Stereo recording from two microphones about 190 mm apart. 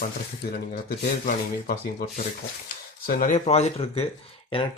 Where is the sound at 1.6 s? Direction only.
45° left (ahead or behind); by 4.1 s 30° left (ahead or behind).